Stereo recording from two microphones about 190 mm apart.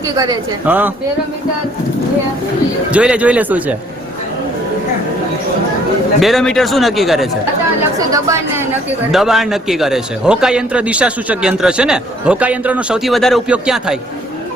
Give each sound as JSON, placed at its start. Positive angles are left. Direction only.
{"t": 0.6, "sound": "speech", "side_deg": -10}
{"t": 2.9, "sound": "speech", "side_deg": -5}
{"t": 6.1, "sound": "a man's voice", "side_deg": 0}
{"t": 7.9, "sound": "speech", "side_deg": -15}
{"t": 9.1, "sound": "a man's voice", "side_deg": 0}